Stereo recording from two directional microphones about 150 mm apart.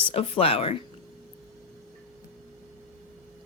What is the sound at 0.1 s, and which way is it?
Speech, 40° left (ahead or behind).